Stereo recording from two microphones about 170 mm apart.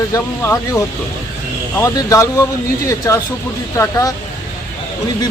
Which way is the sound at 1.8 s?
20° left (ahead or behind).